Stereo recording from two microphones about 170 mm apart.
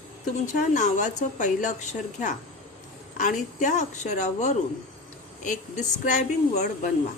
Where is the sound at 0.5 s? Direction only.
45° left (ahead or behind).